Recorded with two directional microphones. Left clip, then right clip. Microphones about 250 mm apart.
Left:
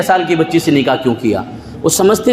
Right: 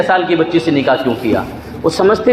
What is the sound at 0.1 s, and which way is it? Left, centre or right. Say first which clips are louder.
A man's voice: even; left.